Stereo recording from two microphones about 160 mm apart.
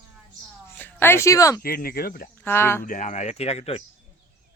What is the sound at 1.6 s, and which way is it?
Speech, 70° left (ahead or behind).